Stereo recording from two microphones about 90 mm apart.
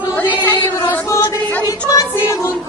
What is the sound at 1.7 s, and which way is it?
Child singing, 40° left (ahead or behind).